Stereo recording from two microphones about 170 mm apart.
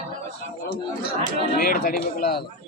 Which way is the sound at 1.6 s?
60° left (ahead or behind).